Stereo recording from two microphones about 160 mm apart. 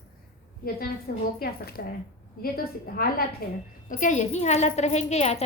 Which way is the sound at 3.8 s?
50° left (ahead or behind).